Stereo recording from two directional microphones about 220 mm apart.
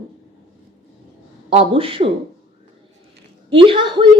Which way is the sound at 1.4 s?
25° right (ahead or behind).